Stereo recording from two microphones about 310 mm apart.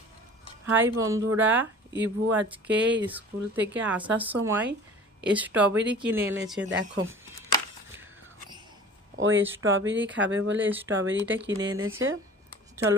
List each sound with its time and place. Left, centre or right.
0.7 s speech: centre
6.6 s speech: right
9.1 s speech: right